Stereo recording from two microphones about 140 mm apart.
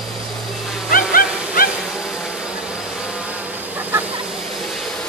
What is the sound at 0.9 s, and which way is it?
Music, 90° left.